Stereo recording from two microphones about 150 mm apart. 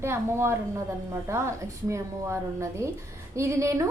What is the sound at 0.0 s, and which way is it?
A woman's voice, 15° right (ahead or behind).